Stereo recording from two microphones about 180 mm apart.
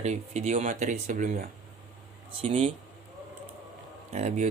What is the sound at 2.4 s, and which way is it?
Speech, 35° right (ahead or behind).